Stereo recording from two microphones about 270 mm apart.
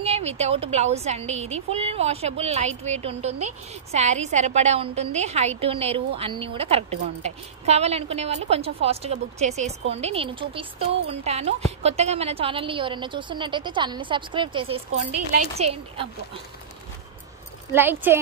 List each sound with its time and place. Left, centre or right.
0.0 s speech: right
17.7 s speech: centre